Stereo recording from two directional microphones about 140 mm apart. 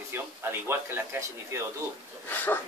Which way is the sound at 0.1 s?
15° right (ahead or behind).